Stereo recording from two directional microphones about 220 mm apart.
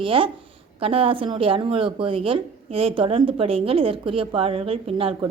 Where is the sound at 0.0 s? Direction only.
25° right (ahead or behind).